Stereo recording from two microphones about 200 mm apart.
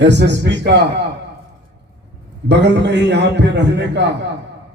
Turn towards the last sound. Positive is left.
turn(degrees=-60)  # may be behind; listen again after turning